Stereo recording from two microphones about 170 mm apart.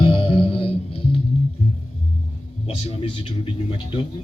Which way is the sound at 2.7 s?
30° left (ahead or behind).